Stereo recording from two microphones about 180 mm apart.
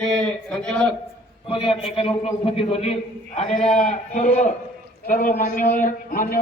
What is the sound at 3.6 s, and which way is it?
Speech, 5° left (ahead or behind).